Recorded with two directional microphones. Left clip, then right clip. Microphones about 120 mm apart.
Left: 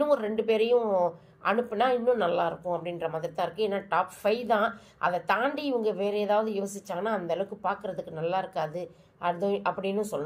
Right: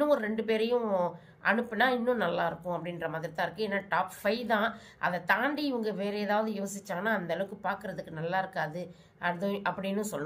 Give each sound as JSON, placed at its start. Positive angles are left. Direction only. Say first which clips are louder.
{"t": 0.0, "sound": "a woman's voice", "louder": "left 2 dB", "side_deg": 15}